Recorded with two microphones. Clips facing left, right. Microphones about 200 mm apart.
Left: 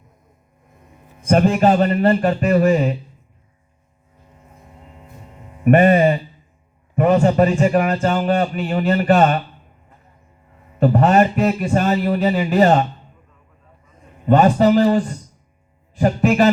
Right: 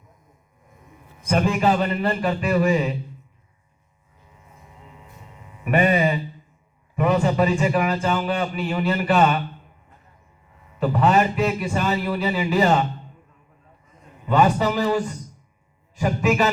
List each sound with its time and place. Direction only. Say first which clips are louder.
1.3 s a man's voice: left 5 dB; 45° left (ahead or behind)
4.9 s hum: left 4 dB; 45° left (ahead or behind)
6.9 s a man's voice: left 5 dB; 45° left (ahead or behind)
10.8 s a man's voice: left 5 dB; 45° left (ahead or behind)
14.3 s a man's voice: left 6 dB; 50° left (ahead or behind)